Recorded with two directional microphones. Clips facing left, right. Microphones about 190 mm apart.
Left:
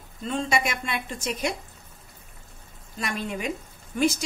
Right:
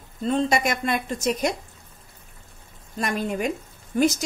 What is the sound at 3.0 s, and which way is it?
Speech, 45° right (ahead or behind).